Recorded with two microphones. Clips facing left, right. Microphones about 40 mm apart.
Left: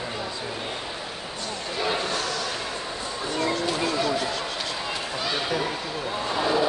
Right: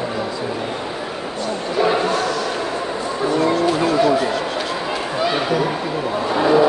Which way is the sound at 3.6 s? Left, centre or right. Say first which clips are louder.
Right 9 dB; centre.